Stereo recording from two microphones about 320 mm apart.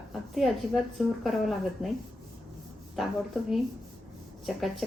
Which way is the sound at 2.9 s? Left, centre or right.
Centre.